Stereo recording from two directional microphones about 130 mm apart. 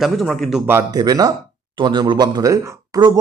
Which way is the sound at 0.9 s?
30° right (ahead or behind).